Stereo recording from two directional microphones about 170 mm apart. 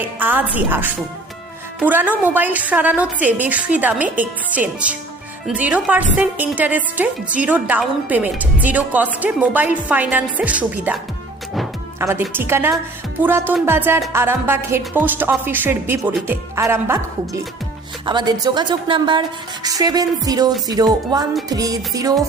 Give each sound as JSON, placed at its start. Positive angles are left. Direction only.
{"t": 0.0, "sound": "a woman's voice", "side_deg": -10}
{"t": 11.9, "sound": "a woman's voice", "side_deg": -15}
{"t": 18.0, "sound": "a woman's voice", "side_deg": -25}